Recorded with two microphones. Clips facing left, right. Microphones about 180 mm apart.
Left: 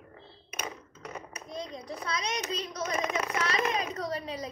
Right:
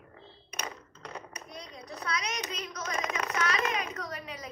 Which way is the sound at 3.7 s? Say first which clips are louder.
Left 4 dB; 30° left (ahead or behind).